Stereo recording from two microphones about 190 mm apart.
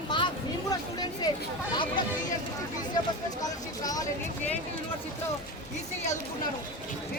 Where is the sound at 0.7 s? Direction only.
20° left (ahead or behind).